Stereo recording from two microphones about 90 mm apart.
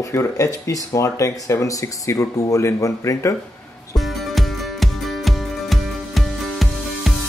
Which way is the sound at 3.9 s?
Centre (ahead or behind).